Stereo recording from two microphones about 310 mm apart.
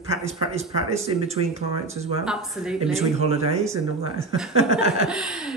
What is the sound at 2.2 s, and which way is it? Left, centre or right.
Speech, centre.